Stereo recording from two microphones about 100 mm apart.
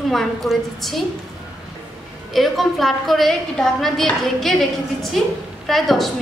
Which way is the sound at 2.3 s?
Centre (ahead or behind).